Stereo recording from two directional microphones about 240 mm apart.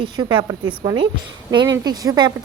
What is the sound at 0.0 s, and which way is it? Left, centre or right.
A woman's voice, right.